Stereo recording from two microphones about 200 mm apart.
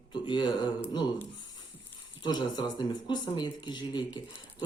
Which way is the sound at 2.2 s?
20° left (ahead or behind).